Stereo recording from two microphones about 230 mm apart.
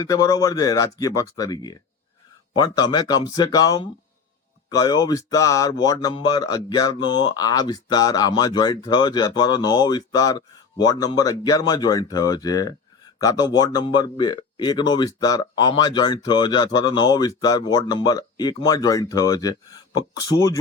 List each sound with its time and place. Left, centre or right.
0.0 s speech: centre